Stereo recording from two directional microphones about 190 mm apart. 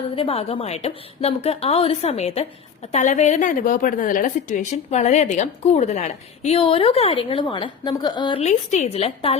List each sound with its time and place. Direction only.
0.2 s a woman's voice: 30° left (ahead or behind)